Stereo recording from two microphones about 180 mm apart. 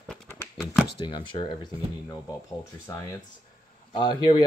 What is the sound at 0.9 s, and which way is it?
Speech, 25° left (ahead or behind).